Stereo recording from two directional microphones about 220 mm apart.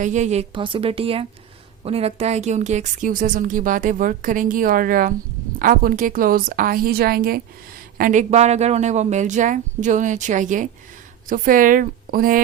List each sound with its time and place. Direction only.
0.0 s a woman's voice: 35° right (ahead or behind)